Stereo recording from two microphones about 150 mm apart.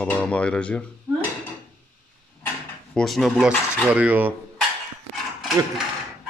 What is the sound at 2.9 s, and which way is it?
Cutlery, centre (ahead or behind).